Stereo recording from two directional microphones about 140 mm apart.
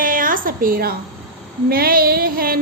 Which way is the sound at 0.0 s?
75° right (ahead or behind).